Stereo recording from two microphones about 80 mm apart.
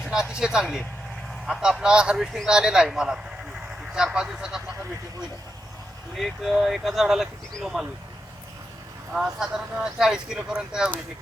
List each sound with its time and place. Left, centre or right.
0.0 s speech: centre
6.1 s speech: centre
9.1 s speech: centre